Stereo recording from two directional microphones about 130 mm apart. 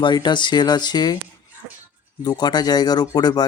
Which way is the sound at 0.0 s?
35° left (ahead or behind).